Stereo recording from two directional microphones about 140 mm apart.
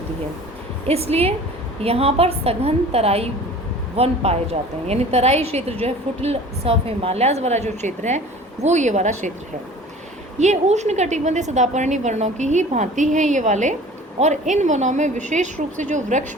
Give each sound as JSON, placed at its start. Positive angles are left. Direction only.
{"t": 0.9, "sound": "a woman's voice", "side_deg": -45}
{"t": 10.3, "sound": "a woman's voice", "side_deg": -55}